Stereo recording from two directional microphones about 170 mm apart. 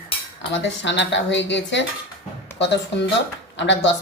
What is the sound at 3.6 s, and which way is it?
Speech, 90° left.